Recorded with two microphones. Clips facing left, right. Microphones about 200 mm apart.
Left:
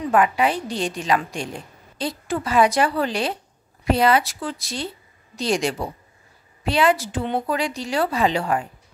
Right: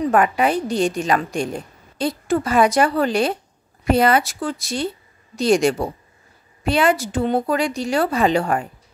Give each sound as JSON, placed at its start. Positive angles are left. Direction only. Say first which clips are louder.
{"t": 0.0, "sound": "a woman's voice", "louder": "right 2 dB", "side_deg": -45}